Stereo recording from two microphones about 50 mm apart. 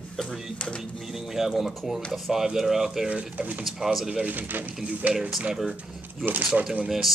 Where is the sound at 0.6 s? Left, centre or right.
Left.